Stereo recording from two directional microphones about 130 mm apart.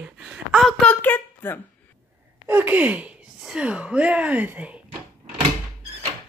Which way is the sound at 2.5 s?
15° right (ahead or behind).